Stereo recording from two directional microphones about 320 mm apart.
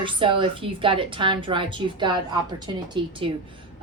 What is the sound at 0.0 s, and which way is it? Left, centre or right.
Speech, centre.